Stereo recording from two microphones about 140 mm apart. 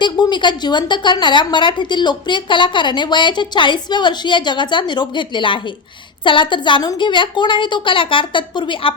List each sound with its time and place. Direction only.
0.0 s a woman's voice: 35° left (ahead or behind)